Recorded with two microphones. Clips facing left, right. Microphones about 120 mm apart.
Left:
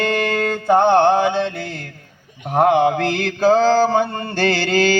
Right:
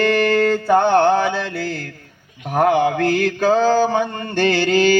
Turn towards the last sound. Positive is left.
turn(degrees=35)  # may be behind; listen again after turning